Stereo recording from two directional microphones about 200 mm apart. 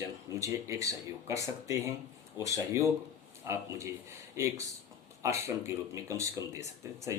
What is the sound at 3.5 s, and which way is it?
Speech, 15° right (ahead or behind).